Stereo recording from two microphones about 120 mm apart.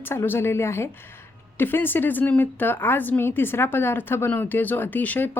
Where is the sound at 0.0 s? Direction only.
20° left (ahead or behind).